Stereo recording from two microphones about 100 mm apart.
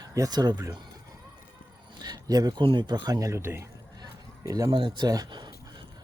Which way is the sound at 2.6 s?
50° right (ahead or behind).